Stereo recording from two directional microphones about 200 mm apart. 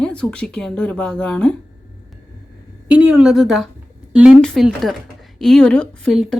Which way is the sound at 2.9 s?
5° right (ahead or behind).